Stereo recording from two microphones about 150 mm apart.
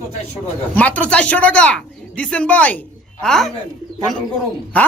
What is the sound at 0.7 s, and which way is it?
Speech, 10° left (ahead or behind).